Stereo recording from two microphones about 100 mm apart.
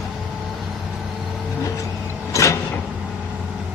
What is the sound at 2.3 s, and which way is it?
Vehicle, 30° left (ahead or behind).